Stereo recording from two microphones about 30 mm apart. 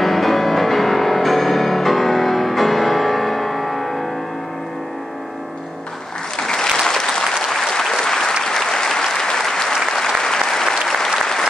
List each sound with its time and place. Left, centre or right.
0.0 s music: centre
6.4 s applause: left
7.2 s applause: centre
8.0 s applause: centre